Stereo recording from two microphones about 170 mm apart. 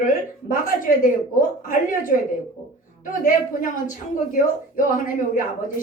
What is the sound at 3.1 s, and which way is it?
A woman's voice, 50° left (ahead or behind).